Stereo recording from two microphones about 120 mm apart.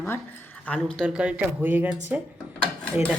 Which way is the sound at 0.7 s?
5° left (ahead or behind).